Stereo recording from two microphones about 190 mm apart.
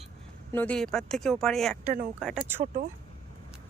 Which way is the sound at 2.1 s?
5° right (ahead or behind).